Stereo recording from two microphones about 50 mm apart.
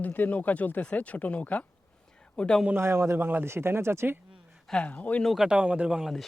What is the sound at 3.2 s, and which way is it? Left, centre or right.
Speech, right.